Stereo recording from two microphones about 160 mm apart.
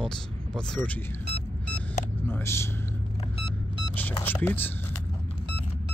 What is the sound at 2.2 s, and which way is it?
Speech, 15° left (ahead or behind).